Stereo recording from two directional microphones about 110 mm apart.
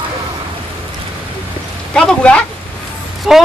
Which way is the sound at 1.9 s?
10° left (ahead or behind).